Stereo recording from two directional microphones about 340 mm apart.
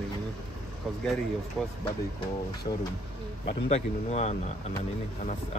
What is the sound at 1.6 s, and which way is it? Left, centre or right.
Speech, centre.